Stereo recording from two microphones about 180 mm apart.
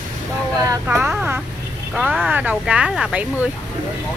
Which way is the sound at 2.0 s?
5° right (ahead or behind).